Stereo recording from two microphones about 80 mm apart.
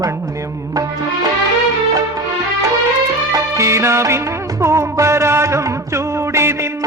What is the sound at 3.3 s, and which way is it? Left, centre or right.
Music, right.